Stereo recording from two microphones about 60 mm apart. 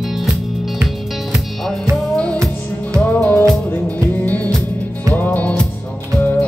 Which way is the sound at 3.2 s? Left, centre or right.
Centre.